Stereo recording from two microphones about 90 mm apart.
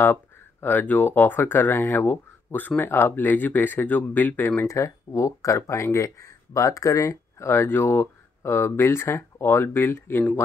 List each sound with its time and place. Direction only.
0.0 s speech: 25° left (ahead or behind)
4.6 s speech: 35° left (ahead or behind)